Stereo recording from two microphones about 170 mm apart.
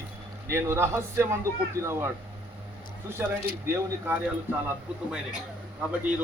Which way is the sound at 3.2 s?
10° right (ahead or behind).